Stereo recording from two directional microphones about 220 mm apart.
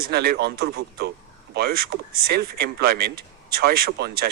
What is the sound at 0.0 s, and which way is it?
A man's voice, 45° right (ahead or behind).